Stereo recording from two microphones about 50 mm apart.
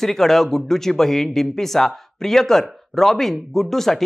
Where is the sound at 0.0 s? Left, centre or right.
Centre.